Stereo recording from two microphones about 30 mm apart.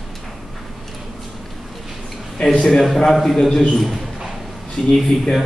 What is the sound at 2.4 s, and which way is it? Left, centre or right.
A man's voice, centre.